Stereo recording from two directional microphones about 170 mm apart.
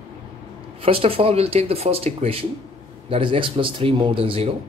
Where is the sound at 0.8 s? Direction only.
35° right (ahead or behind).